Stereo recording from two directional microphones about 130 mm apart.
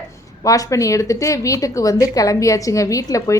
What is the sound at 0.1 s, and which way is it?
Speech, 25° left (ahead or behind).